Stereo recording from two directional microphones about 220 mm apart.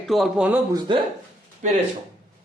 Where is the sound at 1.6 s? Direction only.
35° right (ahead or behind).